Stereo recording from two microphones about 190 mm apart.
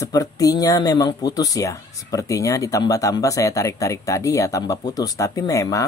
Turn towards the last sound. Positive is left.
turn(degrees=15)  # may be behind; listen again after turning